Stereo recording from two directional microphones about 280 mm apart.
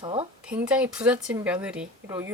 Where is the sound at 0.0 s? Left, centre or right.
Centre.